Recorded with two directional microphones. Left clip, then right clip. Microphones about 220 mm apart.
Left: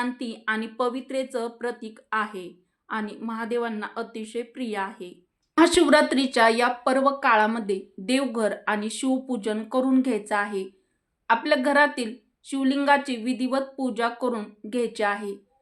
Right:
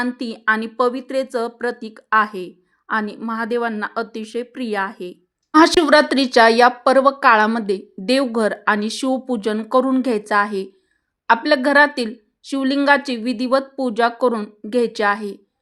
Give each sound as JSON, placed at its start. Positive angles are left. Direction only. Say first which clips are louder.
{"t": 0.0, "sound": "speech", "louder": "right 8 dB", "side_deg": -45}